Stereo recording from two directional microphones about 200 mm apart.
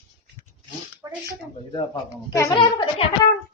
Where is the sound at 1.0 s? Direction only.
15° right (ahead or behind).